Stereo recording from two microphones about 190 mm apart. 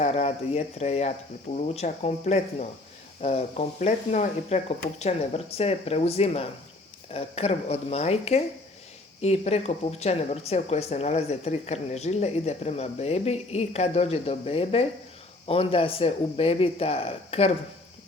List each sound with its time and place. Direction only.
0.0 s speech: 35° left (ahead or behind)